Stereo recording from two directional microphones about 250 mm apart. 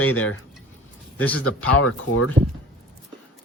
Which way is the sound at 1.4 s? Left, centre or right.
Left.